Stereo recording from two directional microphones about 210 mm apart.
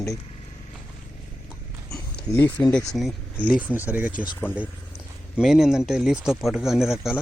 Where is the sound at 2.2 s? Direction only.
10° left (ahead or behind); by 3.7 s 5° right (ahead or behind).